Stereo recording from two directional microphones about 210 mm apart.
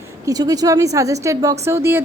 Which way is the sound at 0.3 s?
15° right (ahead or behind).